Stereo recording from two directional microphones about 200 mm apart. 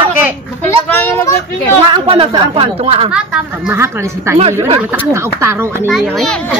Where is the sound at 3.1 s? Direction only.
5° right (ahead or behind).